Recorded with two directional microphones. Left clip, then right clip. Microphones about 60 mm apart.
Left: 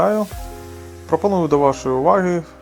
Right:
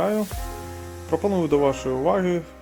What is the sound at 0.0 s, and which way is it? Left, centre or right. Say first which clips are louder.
Speech: left 6 dB; left.